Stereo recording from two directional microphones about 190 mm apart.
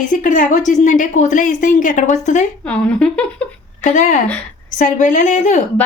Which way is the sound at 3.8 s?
40° left (ahead or behind).